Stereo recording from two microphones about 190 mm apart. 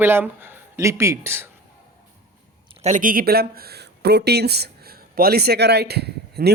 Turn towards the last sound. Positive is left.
turn(degrees=-60)  # may be behind; listen again after turning